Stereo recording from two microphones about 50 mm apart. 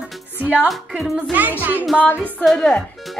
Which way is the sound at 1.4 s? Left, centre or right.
Right.